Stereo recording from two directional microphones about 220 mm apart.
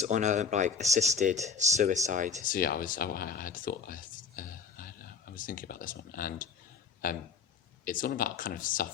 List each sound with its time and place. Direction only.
0.0 s speech: 35° right (ahead or behind)
2.4 s speech: 40° left (ahead or behind)